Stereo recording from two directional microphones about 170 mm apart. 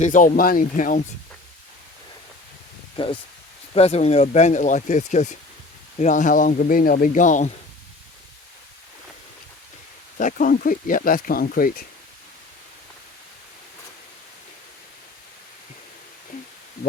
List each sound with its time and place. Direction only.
0.0 s speech: 50° left (ahead or behind)
2.9 s speech: 30° left (ahead or behind); by 7.5 s 45° left (ahead or behind)
10.2 s speech: 50° left (ahead or behind)